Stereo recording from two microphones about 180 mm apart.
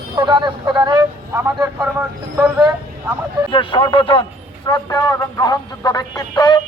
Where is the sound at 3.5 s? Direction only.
30° left (ahead or behind).